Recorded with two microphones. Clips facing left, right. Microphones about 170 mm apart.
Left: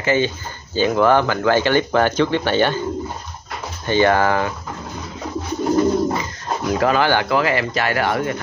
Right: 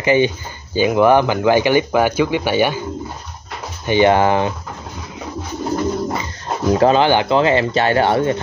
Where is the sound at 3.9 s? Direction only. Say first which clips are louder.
Right 3 dB; 20° right (ahead or behind).